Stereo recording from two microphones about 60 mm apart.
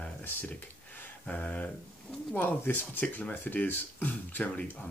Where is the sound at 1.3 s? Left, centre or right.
Left.